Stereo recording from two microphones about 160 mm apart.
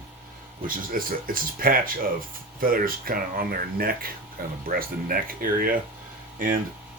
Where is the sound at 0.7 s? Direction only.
60° right (ahead or behind).